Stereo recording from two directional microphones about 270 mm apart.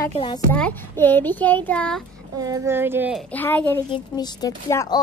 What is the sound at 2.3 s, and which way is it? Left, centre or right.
Speech, centre.